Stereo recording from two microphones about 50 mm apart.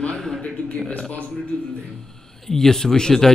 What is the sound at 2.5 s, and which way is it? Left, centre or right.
Speech, centre.